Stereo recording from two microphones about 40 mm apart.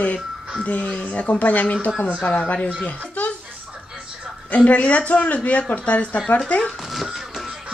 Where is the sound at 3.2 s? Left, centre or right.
Left.